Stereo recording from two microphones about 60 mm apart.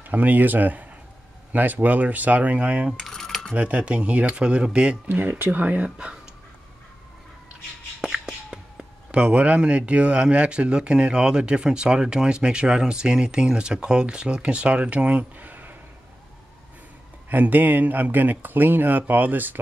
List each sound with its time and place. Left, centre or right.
0.0 s speech: right
2.9 s coin: centre
3.5 s speech: right
5.1 s speech: right
8.0 s speech: centre; by 15.7 s right
17.3 s speech: right